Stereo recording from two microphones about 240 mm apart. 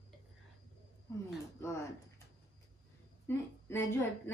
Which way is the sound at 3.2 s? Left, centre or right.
Centre.